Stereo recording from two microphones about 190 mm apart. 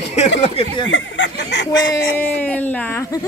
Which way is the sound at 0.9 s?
80° left.